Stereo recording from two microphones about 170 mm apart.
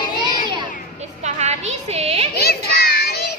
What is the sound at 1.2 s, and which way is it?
Music, 40° right (ahead or behind).